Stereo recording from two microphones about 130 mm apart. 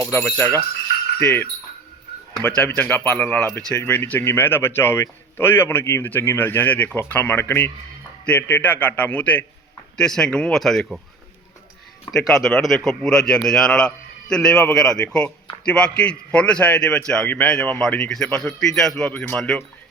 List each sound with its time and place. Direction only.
0.1 s a man's voice: 15° left (ahead or behind); by 11.0 s centre (ahead or behind)
12.1 s a man's voice: centre (ahead or behind)